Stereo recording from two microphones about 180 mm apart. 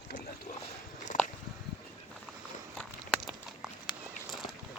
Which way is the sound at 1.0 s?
45° left (ahead or behind).